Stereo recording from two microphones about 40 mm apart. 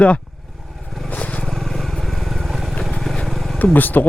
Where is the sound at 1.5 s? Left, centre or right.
Centre.